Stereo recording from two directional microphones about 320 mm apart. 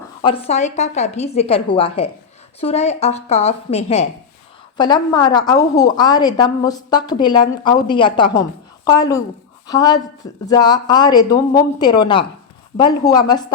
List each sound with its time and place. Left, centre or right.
0.2 s a woman's voice: centre